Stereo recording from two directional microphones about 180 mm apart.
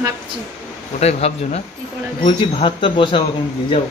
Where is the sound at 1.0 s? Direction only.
35° left (ahead or behind).